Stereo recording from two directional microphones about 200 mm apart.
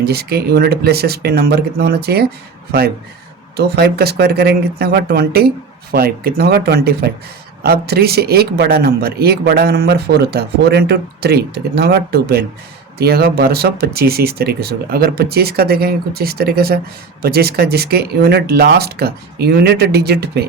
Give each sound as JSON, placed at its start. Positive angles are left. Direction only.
{"t": 0.0, "sound": "speech", "side_deg": -50}
{"t": 3.6, "sound": "speech", "side_deg": -55}